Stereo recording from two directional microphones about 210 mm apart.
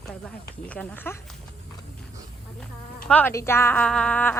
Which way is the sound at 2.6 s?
5° left (ahead or behind).